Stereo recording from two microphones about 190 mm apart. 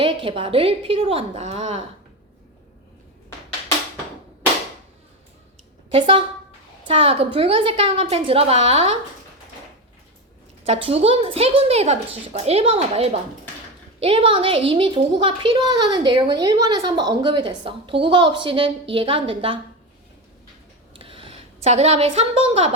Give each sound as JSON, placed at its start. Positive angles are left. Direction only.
{"t": 0.0, "sound": "a woman's voice", "side_deg": -30}
{"t": 5.9, "sound": "a woman's voice", "side_deg": -25}
{"t": 10.7, "sound": "a woman's voice", "side_deg": -30}
{"t": 20.9, "sound": "a sound", "side_deg": -30}